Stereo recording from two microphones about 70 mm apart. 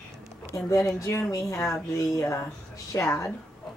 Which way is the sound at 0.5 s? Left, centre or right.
Left.